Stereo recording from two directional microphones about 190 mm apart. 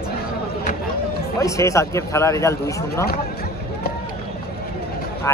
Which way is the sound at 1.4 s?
15° left (ahead or behind).